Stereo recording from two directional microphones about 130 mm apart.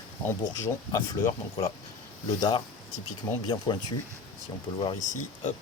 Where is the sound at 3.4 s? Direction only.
35° left (ahead or behind).